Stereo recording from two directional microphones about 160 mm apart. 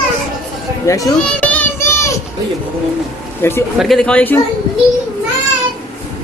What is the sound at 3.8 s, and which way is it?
Speech, centre (ahead or behind).